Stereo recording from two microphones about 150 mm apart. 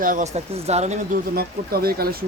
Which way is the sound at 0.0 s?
60° right (ahead or behind).